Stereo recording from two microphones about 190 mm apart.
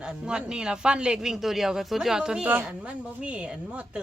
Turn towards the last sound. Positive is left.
turn(degrees=-5)  # may be behind; listen again after turning